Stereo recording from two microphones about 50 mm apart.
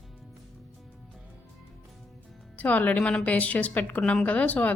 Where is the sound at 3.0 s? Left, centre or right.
Left.